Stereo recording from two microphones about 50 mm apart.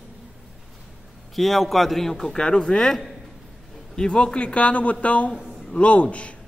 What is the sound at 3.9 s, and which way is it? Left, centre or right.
A man's voice, centre.